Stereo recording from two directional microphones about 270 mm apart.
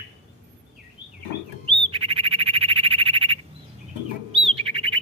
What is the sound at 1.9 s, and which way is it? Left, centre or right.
Bird, centre.